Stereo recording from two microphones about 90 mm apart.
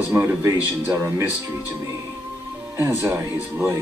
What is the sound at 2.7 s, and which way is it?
Speech, 30° right (ahead or behind).